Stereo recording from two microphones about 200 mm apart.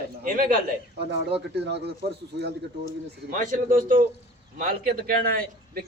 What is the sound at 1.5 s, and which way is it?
Speech, 60° right (ahead or behind).